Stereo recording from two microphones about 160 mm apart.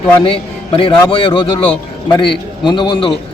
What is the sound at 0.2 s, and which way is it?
A man's voice, 35° left (ahead or behind).